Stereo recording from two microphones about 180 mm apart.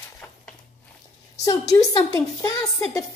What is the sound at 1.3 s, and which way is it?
A woman's voice, 20° left (ahead or behind).